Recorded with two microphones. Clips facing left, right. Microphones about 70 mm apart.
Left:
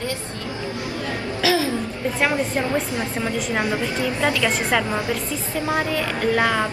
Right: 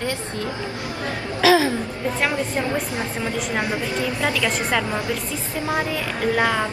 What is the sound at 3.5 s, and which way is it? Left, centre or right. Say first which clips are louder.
Speech: left 1 dB; centre.